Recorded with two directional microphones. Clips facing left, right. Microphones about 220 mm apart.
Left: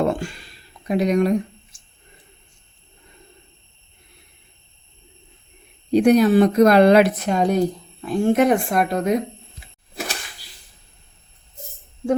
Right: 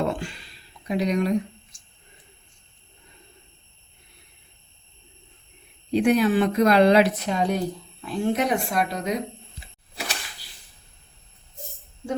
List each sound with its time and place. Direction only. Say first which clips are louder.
0.1 s a sound: left 5 dB; 45° left (ahead or behind)
0.9 s a woman's voice: left 5 dB; 50° left (ahead or behind)
5.9 s a woman's voice: left 5 dB; 40° left (ahead or behind)